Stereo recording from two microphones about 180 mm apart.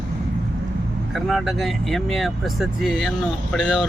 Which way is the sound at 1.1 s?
Centre (ahead or behind).